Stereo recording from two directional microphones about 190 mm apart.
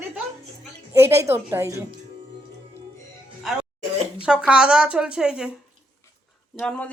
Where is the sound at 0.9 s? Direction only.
15° right (ahead or behind).